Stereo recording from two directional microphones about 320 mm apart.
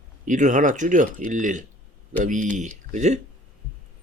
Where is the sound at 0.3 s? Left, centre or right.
Right.